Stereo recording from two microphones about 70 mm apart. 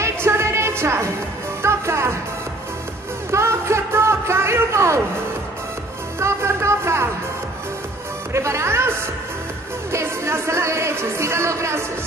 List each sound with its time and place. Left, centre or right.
0.0 s music: right
3.3 s a sound: right
6.1 s music: right
8.3 s speech: right